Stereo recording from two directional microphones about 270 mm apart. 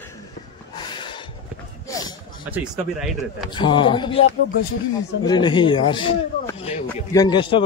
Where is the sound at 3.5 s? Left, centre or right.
Centre.